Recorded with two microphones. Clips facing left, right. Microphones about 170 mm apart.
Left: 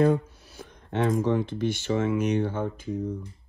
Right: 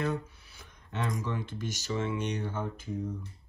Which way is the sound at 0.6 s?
55° left (ahead or behind).